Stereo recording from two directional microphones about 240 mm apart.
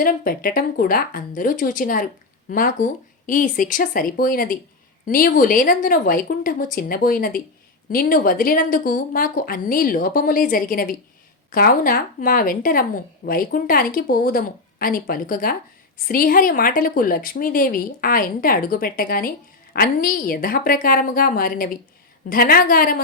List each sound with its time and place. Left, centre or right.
0.0 s a woman's voice: left